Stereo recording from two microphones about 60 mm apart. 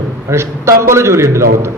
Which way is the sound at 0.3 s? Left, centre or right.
Right.